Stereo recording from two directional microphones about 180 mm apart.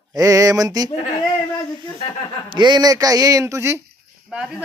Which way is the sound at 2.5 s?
25° right (ahead or behind).